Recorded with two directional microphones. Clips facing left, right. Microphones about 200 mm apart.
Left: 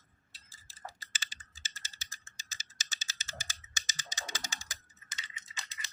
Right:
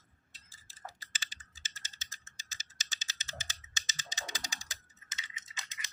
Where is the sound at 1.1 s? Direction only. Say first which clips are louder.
Left 2 dB; 20° right (ahead or behind).